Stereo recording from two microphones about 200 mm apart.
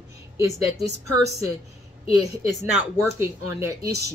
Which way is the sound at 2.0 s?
30° left (ahead or behind).